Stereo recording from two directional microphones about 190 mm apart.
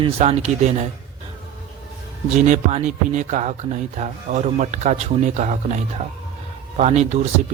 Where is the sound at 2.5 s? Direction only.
40° right (ahead or behind).